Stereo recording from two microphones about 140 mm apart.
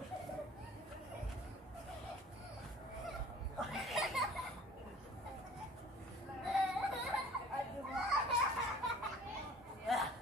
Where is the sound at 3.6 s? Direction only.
Centre (ahead or behind).